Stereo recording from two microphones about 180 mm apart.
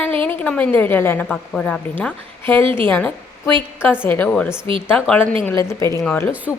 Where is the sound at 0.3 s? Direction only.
10° left (ahead or behind).